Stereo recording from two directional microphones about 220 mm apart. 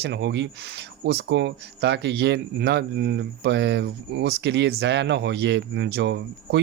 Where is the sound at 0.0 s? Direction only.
50° right (ahead or behind).